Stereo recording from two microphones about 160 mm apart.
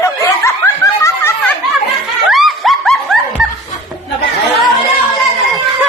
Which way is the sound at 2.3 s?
Centre (ahead or behind).